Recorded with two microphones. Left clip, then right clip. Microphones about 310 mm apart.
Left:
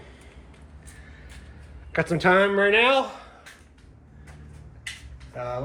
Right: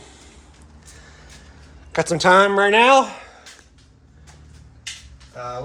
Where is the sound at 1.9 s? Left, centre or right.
Centre.